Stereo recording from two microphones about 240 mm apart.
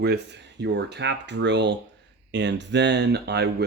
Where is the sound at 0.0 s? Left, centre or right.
Right.